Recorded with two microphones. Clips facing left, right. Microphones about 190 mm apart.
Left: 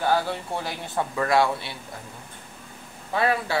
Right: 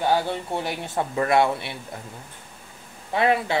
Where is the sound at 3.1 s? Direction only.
20° right (ahead or behind).